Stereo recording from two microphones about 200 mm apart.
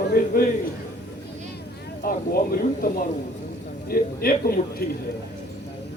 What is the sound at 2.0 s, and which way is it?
Speech, 50° left (ahead or behind).